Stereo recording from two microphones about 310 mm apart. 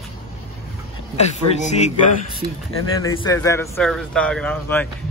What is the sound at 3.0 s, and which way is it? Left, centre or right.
A man's voice, centre.